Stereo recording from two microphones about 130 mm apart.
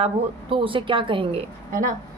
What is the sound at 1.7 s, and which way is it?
Speech, 90° right.